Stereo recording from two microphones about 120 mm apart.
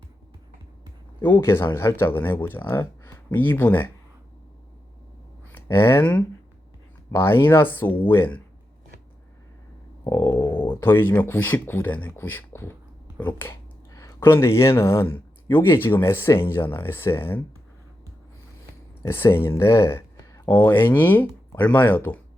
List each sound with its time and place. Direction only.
1.2 s speech: 20° left (ahead or behind)
5.5 s speech: 20° left (ahead or behind)
10.0 s a sound: 35° left (ahead or behind)
10.8 s speech: 15° left (ahead or behind)
19.0 s speech: 20° left (ahead or behind)